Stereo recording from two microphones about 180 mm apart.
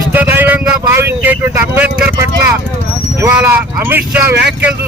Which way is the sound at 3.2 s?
10° right (ahead or behind).